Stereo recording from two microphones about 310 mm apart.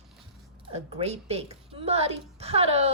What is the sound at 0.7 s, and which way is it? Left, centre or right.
A woman's voice, centre.